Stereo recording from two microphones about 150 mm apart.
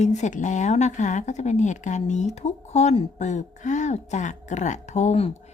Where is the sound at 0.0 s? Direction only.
50° left (ahead or behind).